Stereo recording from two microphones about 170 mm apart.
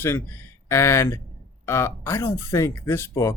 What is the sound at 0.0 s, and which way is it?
Speech, 15° left (ahead or behind).